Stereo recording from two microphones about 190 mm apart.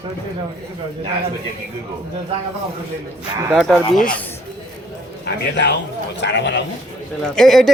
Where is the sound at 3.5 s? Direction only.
Centre (ahead or behind).